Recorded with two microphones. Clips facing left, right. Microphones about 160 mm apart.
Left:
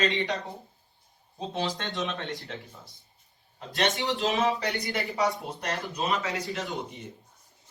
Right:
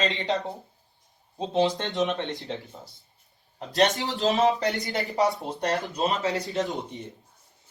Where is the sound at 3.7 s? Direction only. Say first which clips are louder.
Right 4 dB; 40° right (ahead or behind).